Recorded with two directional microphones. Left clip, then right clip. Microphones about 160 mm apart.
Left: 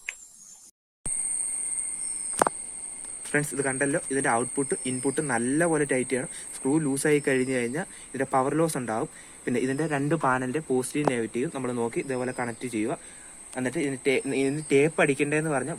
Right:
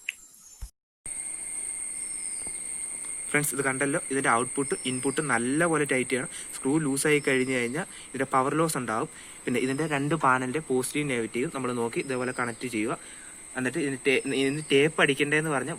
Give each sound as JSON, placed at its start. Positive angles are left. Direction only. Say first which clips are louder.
{"t": 3.3, "sound": "speech", "louder": "even", "side_deg": 25}